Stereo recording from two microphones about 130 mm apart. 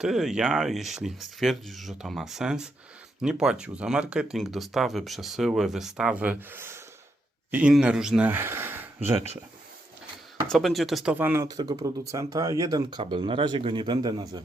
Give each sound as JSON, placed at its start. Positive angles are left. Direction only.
{"t": 0.0, "sound": "speech", "side_deg": -5}
{"t": 7.5, "sound": "speech", "side_deg": -5}
{"t": 10.5, "sound": "speech", "side_deg": 0}
{"t": 11.4, "sound": "a man's voice", "side_deg": -35}